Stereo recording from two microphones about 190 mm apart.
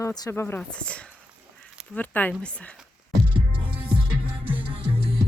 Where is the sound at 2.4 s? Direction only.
5° left (ahead or behind).